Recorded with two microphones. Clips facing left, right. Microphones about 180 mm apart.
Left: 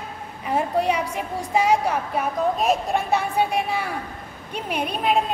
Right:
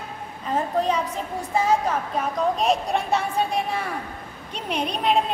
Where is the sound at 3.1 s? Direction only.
65° left (ahead or behind).